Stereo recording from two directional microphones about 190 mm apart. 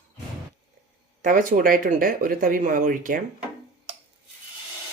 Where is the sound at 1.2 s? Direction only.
45° right (ahead or behind).